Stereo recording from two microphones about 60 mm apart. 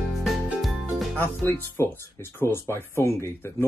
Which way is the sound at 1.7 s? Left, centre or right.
Left.